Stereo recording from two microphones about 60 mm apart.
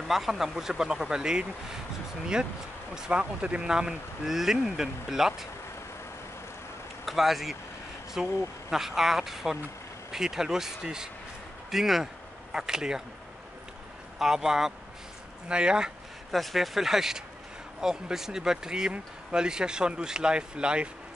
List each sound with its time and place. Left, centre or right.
0.1 s speech: centre
2.9 s speech: centre
7.1 s speech: centre
14.1 s speech: centre
16.3 s speech: centre